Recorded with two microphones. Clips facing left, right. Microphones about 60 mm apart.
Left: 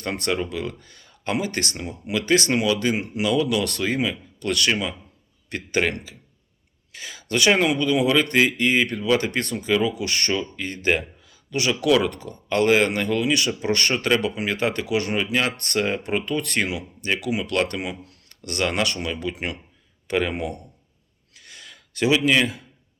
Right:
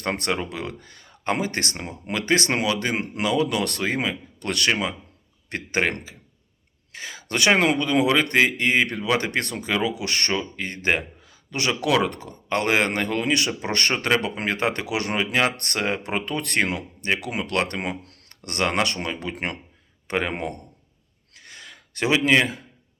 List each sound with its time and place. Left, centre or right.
0.0 s speech: right
4.7 s speech: right
21.3 s a sound: right